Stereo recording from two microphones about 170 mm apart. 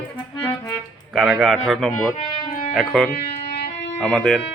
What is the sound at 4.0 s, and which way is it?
Speech, centre (ahead or behind).